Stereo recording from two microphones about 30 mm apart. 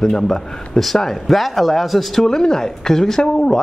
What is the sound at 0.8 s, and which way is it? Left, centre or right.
Speech, centre.